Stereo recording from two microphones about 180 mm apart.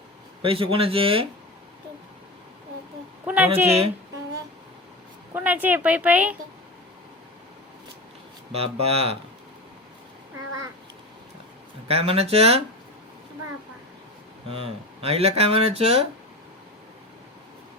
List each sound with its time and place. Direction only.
0.4 s speech: 30° right (ahead or behind)
3.2 s speech: 10° right (ahead or behind)
5.3 s speech: 10° right (ahead or behind)
8.5 s speech: 35° right (ahead or behind)
11.9 s speech: 35° right (ahead or behind)
14.5 s speech: 30° right (ahead or behind)